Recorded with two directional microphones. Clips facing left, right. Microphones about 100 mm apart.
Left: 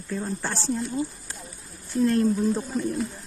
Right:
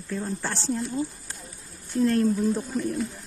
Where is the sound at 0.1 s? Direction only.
10° left (ahead or behind).